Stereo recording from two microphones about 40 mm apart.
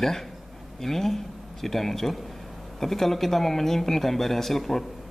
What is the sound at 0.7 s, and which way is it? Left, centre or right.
Speech, centre.